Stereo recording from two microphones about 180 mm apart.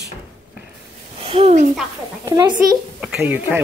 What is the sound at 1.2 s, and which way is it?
Speech, 30° right (ahead or behind).